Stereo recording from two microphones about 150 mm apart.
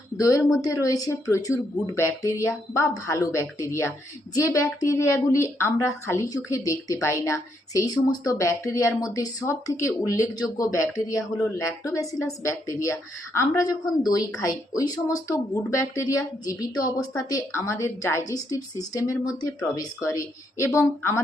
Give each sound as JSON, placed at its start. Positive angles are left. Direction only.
{"t": 0.2, "sound": "a woman's voice", "side_deg": 20}